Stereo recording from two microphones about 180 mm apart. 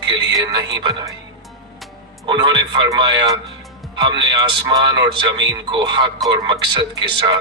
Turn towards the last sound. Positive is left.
turn(degrees=-25)  # may be behind; listen again after turning